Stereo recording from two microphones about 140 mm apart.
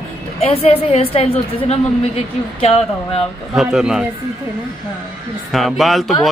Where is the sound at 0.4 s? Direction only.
45° left (ahead or behind).